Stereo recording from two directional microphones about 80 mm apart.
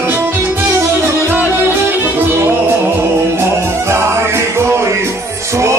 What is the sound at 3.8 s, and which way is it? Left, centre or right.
Music, right.